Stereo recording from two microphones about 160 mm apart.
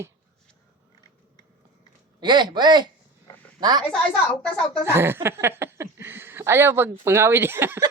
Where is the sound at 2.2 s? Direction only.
30° right (ahead or behind).